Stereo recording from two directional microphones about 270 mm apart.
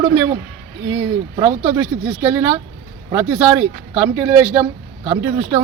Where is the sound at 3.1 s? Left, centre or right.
Centre.